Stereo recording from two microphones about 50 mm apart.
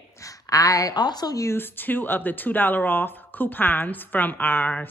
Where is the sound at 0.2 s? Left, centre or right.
Left.